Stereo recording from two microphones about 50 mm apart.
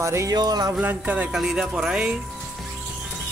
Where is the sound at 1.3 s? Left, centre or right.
Centre.